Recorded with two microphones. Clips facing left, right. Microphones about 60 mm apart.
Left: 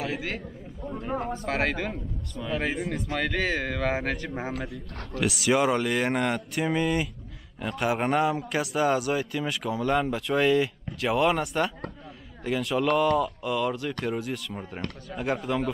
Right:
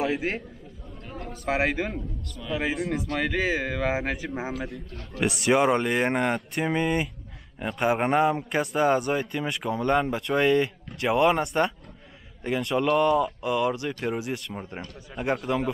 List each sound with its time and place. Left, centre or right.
0.0 s a sound: right
0.9 s speech: left
1.4 s speech: centre
2.5 s speech: centre
5.3 s speech: centre